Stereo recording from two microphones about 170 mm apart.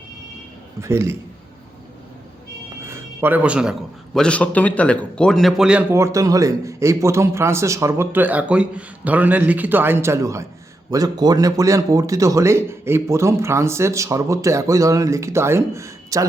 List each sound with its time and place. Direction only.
0.8 s speech: 15° right (ahead or behind)
2.8 s a man's voice: 15° right (ahead or behind)
5.9 s speech: 15° right (ahead or behind)